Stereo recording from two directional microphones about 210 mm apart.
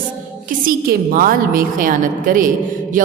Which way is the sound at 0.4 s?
40° right (ahead or behind).